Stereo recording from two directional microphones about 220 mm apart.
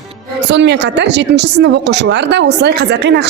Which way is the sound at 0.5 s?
50° right (ahead or behind).